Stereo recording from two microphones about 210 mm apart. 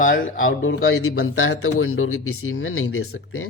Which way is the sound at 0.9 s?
90° left.